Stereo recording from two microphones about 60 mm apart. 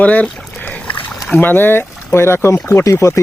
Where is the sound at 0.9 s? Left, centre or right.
Left.